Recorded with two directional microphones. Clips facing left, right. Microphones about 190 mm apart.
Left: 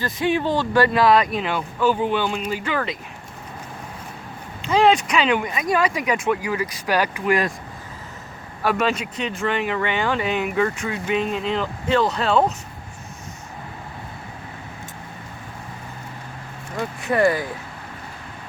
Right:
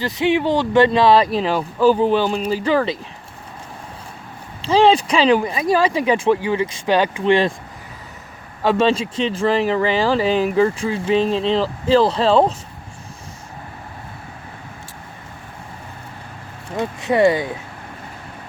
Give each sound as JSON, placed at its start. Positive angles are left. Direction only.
{"t": 0.0, "sound": "speech", "side_deg": -20}
{"t": 4.6, "sound": "speech", "side_deg": -30}
{"t": 8.6, "sound": "speech", "side_deg": -25}
{"t": 16.7, "sound": "speech", "side_deg": -20}